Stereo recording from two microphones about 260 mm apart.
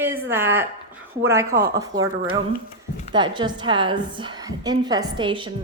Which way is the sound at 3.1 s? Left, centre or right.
Centre.